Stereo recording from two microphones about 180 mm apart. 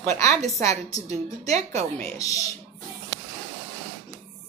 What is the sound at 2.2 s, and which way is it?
Speech, 20° left (ahead or behind).